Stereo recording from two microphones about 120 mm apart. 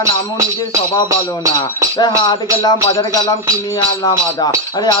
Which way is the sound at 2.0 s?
35° left (ahead or behind).